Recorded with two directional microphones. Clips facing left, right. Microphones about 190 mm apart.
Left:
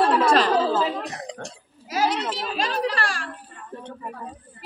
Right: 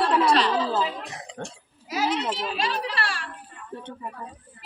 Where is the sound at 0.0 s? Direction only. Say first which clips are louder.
Left 2 dB; 50° left (ahead or behind).